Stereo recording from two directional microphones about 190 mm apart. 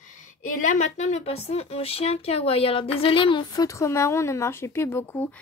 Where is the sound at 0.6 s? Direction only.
35° left (ahead or behind).